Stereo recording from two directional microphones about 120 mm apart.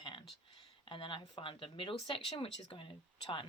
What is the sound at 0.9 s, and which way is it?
Speech, 45° left (ahead or behind).